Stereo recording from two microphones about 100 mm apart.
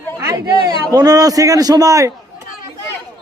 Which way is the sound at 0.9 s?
40° right (ahead or behind).